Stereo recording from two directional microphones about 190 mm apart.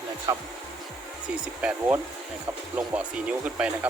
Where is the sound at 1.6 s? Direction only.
5° right (ahead or behind).